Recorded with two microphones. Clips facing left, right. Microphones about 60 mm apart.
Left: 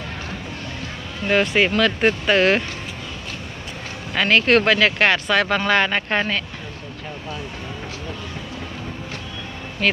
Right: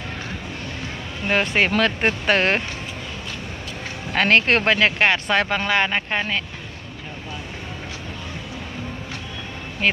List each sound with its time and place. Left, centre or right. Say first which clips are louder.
1.3 s speech: left 2 dB; right
1.8 s speech: left 2 dB; right
4.1 s speech: left 1 dB; right
5.7 s speech: left 2 dB; centre